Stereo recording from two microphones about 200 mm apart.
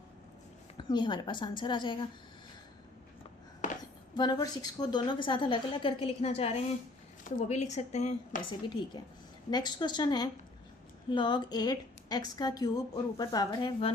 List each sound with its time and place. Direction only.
0.8 s a woman's voice: 20° left (ahead or behind)
4.1 s a woman's voice: 20° left (ahead or behind)
9.5 s a woman's voice: 20° left (ahead or behind)